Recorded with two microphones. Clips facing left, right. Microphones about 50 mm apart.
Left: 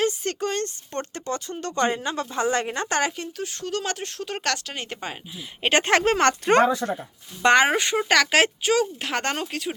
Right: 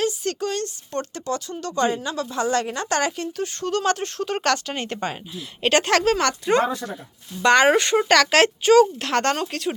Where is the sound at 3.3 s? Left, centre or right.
Centre.